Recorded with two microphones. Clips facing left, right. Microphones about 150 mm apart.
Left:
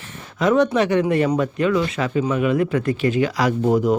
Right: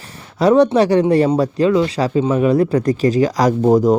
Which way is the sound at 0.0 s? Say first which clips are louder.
Right 5 dB; 35° right (ahead or behind).